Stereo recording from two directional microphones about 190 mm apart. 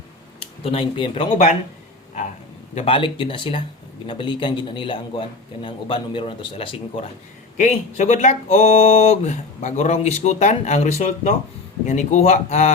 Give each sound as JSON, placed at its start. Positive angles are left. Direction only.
{"t": 0.3, "sound": "speech", "side_deg": 30}
{"t": 2.7, "sound": "a man's voice", "side_deg": 25}
{"t": 7.5, "sound": "speech", "side_deg": 40}